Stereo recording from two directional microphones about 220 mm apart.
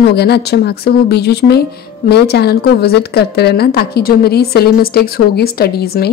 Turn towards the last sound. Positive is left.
turn(degrees=45)  # may be behind; listen again after turning